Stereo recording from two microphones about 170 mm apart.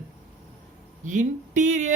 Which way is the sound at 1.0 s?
45° right (ahead or behind).